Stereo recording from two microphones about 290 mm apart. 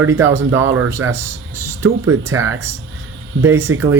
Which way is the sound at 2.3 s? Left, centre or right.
Right.